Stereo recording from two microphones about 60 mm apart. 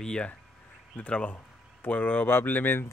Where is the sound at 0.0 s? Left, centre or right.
Centre.